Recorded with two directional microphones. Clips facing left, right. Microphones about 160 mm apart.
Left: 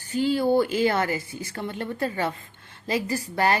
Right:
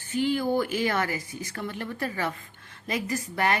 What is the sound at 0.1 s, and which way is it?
Speech, 35° left (ahead or behind).